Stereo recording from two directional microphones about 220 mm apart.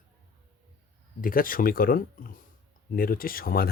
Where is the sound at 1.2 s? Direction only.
40° left (ahead or behind).